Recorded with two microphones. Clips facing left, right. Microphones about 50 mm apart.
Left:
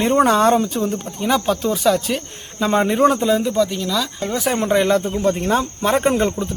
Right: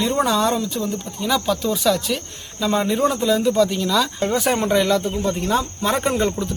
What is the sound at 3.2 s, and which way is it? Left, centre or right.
Speech, centre.